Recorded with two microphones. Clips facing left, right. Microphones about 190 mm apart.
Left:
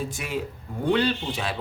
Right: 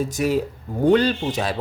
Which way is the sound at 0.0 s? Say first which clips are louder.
Right 9 dB; 40° right (ahead or behind).